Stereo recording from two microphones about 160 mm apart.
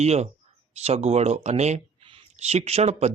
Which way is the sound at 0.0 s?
45° right (ahead or behind).